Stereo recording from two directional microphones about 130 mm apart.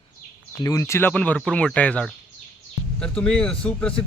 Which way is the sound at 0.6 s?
25° left (ahead or behind).